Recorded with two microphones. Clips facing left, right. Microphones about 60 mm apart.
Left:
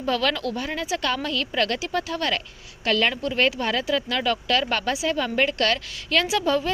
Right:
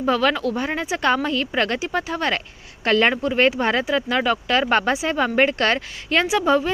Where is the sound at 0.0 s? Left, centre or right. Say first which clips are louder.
Right 4 dB; centre.